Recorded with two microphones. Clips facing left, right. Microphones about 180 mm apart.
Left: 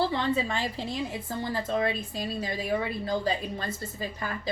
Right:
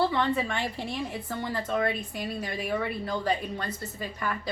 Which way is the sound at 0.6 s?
20° left (ahead or behind).